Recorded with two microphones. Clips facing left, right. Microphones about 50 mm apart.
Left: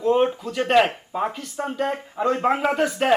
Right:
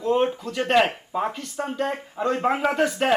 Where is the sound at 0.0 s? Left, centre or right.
Centre.